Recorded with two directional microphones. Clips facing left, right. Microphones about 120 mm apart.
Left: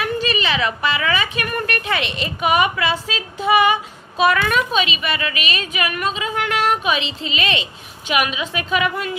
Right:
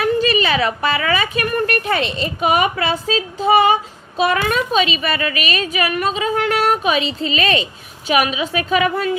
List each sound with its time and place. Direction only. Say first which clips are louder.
0.0 s a woman's voice: right 5 dB; 35° right (ahead or behind)